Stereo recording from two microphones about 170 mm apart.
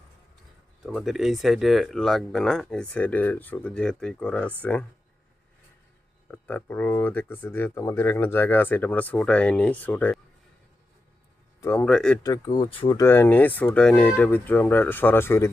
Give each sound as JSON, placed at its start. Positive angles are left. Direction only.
{"t": 0.8, "sound": "speech", "side_deg": -5}
{"t": 6.3, "sound": "speech", "side_deg": 10}
{"t": 11.6, "sound": "speech", "side_deg": 10}
{"t": 12.5, "sound": "speech", "side_deg": 30}
{"t": 13.0, "sound": "speech", "side_deg": 15}